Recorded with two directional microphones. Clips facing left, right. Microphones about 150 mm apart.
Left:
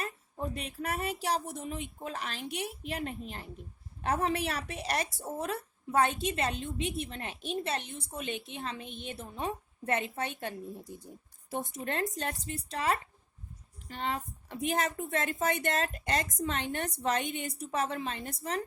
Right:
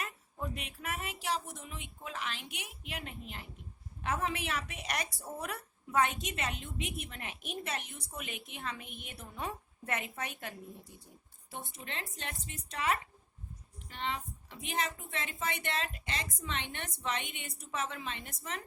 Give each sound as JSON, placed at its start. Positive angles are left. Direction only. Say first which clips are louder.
{"t": 0.0, "sound": "a woman's voice", "louder": "left 4 dB", "side_deg": 35}
{"t": 11.5, "sound": "a woman's voice", "louder": "left 9 dB", "side_deg": 45}